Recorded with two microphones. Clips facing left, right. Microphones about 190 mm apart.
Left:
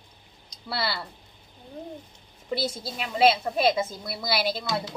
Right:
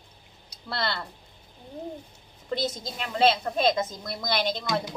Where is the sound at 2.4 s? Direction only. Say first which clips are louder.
Even; 10° left (ahead or behind).